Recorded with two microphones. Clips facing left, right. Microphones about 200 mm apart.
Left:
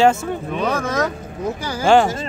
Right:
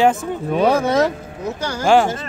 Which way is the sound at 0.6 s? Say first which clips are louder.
Right 6 dB; 30° right (ahead or behind).